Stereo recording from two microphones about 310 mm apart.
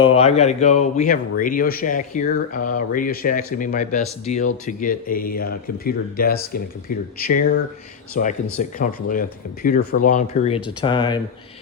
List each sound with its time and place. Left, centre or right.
0.0 s speech: centre